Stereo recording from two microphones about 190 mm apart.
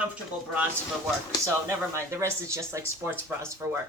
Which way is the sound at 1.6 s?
15° right (ahead or behind).